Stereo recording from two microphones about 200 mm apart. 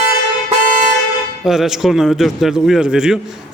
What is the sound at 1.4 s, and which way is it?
A man's voice, centre (ahead or behind).